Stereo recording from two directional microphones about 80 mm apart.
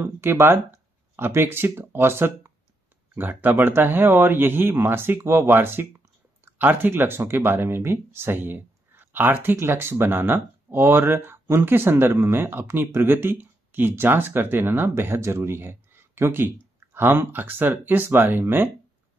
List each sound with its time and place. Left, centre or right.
0.0 s speech: right